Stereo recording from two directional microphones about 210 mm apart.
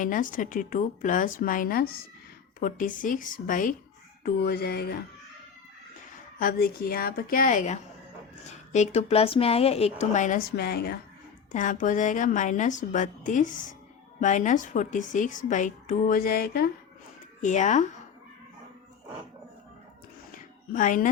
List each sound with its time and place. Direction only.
0.0 s a woman's voice: 40° left (ahead or behind)
6.4 s a woman's voice: 45° left (ahead or behind)
11.5 s a woman's voice: 40° left (ahead or behind)
17.4 s a woman's voice: 35° left (ahead or behind)
20.3 s a sound: 40° left (ahead or behind)